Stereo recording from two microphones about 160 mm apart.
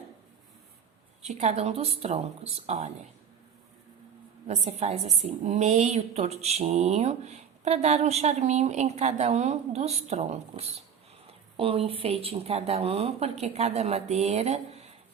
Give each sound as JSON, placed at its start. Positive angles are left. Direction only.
{"t": 1.2, "sound": "speech", "side_deg": -45}
{"t": 4.4, "sound": "a woman's voice", "side_deg": -45}